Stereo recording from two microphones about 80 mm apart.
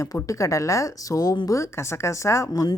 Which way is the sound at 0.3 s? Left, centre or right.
Left.